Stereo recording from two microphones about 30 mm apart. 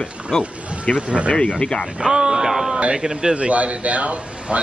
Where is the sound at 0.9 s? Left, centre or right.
Left.